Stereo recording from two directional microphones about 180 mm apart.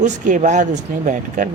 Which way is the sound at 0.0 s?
45° right (ahead or behind).